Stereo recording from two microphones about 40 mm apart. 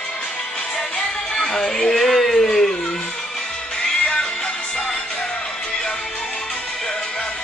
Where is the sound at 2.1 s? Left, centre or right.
Centre.